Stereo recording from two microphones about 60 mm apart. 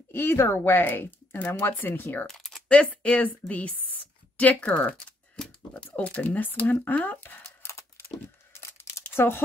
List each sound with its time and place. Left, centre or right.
0.1 s speech: left
2.2 s a sound: centre
2.7 s a woman's voice: centre
4.9 s typing: centre
5.9 s speech: left
7.6 s a sound: left